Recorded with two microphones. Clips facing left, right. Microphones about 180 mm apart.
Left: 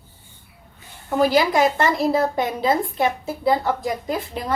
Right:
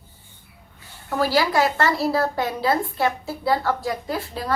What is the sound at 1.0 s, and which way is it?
A woman's voice, 20° left (ahead or behind).